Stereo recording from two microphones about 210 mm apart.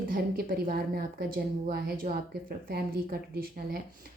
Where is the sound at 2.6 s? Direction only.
45° right (ahead or behind).